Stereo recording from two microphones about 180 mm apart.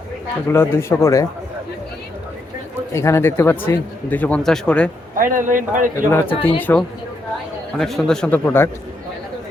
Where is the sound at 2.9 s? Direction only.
15° left (ahead or behind).